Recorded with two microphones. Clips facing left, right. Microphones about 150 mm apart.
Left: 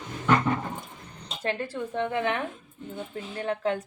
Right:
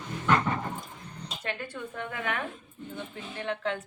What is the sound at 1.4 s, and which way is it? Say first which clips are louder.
A woman's voice: left 7 dB; 30° left (ahead or behind).